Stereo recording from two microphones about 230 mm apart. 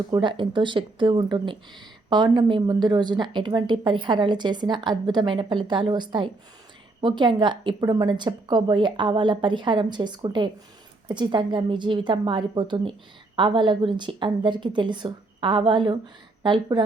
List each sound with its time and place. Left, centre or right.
0.1 s speech: centre